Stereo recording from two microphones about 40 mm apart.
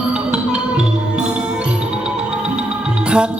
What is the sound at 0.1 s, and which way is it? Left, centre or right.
Music, right.